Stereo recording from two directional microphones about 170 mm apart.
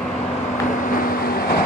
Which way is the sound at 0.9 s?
55° left (ahead or behind).